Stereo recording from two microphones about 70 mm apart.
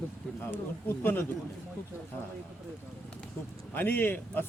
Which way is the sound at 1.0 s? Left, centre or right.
Left.